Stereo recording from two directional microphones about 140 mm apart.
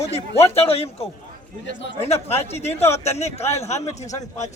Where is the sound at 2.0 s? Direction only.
45° left (ahead or behind).